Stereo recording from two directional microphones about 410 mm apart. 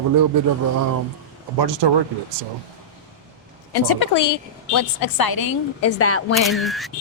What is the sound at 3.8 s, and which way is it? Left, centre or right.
A woman's voice, left.